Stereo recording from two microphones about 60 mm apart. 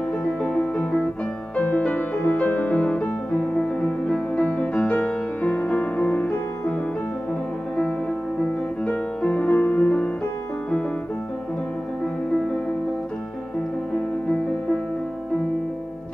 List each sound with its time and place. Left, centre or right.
0.4 s music: left
8.8 s music: centre